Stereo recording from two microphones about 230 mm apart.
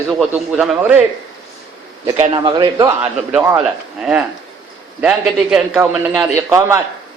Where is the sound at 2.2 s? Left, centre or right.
Right.